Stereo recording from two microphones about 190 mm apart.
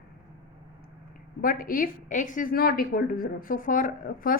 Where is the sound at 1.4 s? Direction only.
50° left (ahead or behind).